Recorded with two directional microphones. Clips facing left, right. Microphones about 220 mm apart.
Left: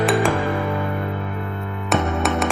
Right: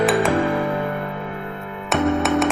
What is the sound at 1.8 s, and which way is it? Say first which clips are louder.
Music: right 3 dB; centre (ahead or behind).